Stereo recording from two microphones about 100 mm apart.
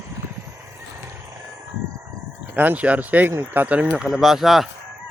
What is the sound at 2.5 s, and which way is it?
Speech, 15° right (ahead or behind).